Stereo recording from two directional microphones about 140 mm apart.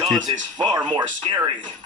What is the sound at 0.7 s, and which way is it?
Speech, 20° right (ahead or behind).